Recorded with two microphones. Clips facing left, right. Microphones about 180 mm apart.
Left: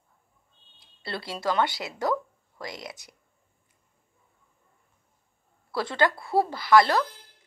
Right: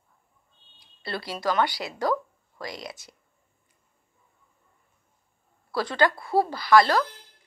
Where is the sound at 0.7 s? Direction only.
25° left (ahead or behind).